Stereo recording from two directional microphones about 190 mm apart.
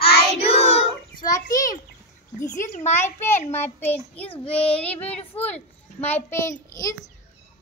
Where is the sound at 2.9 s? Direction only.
10° left (ahead or behind).